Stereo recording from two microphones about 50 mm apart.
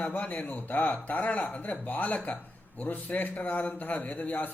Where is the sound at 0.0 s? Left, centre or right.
Left.